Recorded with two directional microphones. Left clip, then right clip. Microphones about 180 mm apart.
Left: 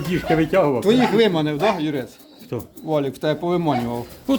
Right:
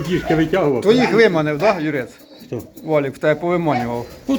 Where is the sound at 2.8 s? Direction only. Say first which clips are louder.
Right 4 dB; 20° left (ahead or behind).